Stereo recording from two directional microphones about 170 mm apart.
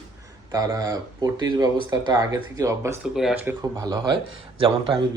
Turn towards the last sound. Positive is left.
turn(degrees=-30)  # may be behind; listen again after turning